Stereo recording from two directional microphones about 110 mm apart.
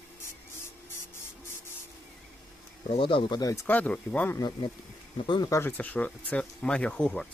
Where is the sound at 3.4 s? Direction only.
30° left (ahead or behind).